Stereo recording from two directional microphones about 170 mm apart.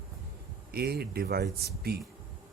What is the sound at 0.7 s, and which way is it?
Speech, 65° right (ahead or behind).